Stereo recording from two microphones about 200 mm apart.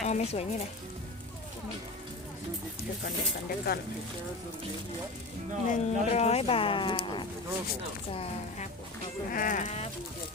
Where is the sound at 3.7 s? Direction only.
50° left (ahead or behind).